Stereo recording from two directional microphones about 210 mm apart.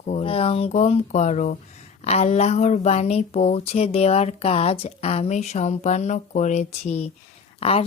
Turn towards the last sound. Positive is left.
turn(degrees=30)  # may be behind; listen again after turning